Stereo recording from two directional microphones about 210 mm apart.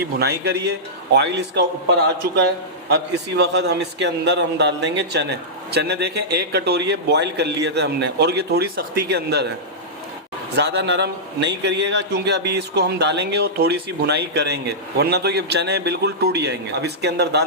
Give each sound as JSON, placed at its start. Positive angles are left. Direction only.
{"t": 0.2, "sound": "a man's voice", "side_deg": -50}
{"t": 10.5, "sound": "a man's voice", "side_deg": -55}